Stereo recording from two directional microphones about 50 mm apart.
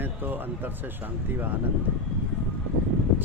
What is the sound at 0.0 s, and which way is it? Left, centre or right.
Speech, right.